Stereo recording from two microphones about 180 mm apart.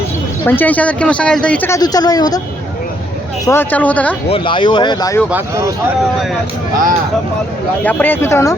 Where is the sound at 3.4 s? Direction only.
10° left (ahead or behind).